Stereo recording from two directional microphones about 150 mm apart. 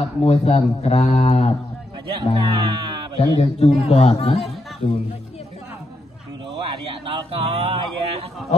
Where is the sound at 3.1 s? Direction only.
40° left (ahead or behind).